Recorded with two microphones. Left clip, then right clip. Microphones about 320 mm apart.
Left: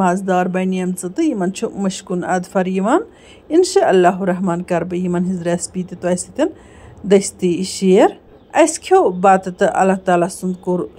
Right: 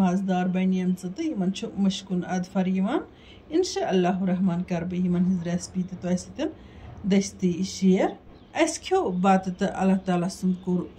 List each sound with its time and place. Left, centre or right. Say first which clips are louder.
0.0 s a woman's voice: left 11 dB; centre